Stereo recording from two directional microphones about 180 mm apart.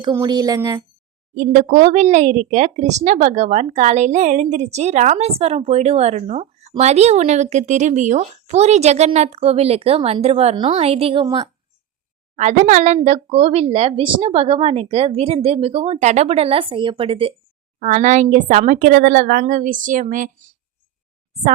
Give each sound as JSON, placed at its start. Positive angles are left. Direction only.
{"t": 0.0, "sound": "speech", "side_deg": -20}
{"t": 1.4, "sound": "speech", "side_deg": -45}
{"t": 12.4, "sound": "speech", "side_deg": -40}
{"t": 17.7, "sound": "a woman's voice", "side_deg": -45}